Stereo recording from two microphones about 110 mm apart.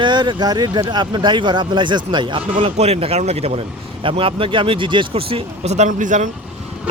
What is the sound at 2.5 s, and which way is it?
Speech, 75° right (ahead or behind).